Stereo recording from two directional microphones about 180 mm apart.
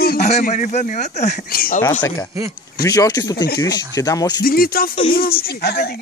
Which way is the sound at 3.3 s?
60° left (ahead or behind).